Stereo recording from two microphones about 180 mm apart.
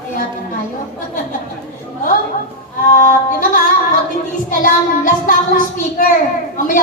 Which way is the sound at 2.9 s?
45° left (ahead or behind).